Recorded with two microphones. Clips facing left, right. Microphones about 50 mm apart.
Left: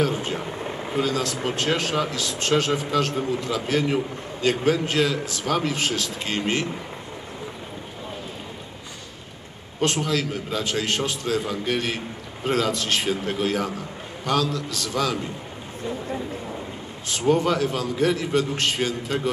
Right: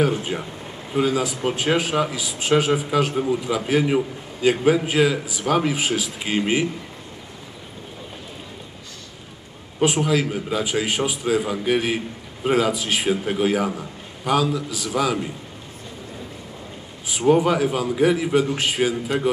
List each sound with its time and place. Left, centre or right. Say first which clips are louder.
0.5 s a sound: left 5 dB; left
0.9 s speech: right 4 dB; centre
9.8 s speech: right 4 dB; centre
17.3 s speech: right 3 dB; centre